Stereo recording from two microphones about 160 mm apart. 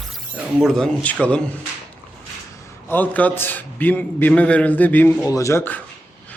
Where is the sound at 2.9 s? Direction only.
10° left (ahead or behind).